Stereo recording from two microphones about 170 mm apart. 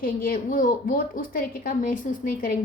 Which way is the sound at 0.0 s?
60° left (ahead or behind).